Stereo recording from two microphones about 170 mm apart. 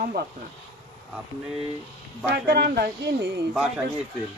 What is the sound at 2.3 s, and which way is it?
Speech, 70° right (ahead or behind).